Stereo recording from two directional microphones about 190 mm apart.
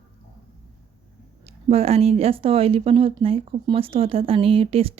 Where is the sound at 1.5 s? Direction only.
30° right (ahead or behind).